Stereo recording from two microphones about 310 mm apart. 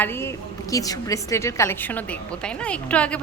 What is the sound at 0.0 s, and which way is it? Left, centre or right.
A woman's voice, centre.